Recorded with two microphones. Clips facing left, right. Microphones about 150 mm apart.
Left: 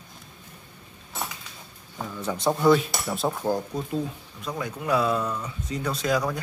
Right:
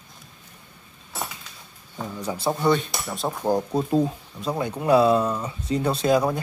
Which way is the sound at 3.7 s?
35° right (ahead or behind).